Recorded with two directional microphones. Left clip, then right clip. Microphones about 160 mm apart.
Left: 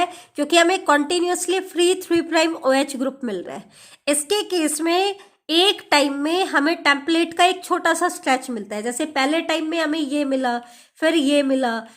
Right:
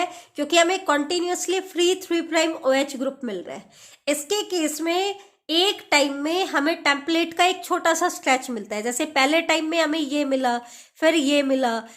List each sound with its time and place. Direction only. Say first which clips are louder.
0.0 s a woman's voice: left 4 dB; 35° left (ahead or behind)